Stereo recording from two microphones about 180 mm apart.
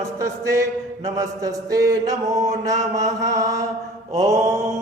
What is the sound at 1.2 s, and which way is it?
Chant, 20° right (ahead or behind).